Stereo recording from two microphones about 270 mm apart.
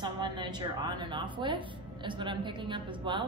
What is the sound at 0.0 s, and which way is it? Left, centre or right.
A woman's voice, centre.